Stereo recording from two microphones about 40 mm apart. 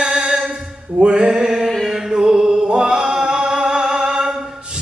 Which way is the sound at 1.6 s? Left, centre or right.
Centre.